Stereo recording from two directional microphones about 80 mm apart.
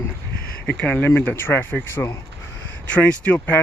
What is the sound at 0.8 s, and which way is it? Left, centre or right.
Speech, centre.